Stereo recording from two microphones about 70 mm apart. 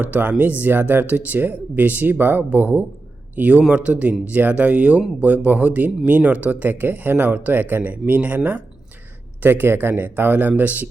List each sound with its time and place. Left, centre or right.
0.0 s speech: right
9.4 s speech: right